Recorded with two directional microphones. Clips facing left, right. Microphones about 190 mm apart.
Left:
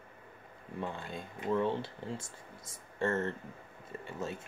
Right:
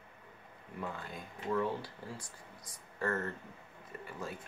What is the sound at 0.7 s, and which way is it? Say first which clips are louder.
Speech: left 3 dB; 25° left (ahead or behind).